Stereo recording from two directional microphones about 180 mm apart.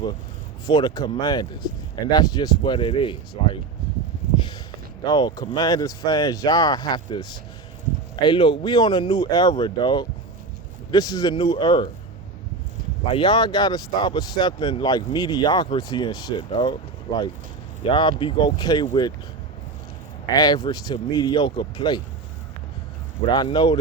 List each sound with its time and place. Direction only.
0.7 s speech: 25° left (ahead or behind)
5.0 s speech: 25° left (ahead or behind)
13.1 s speech: 25° left (ahead or behind)
20.3 s speech: 20° left (ahead or behind)
23.3 s speech: 25° left (ahead or behind)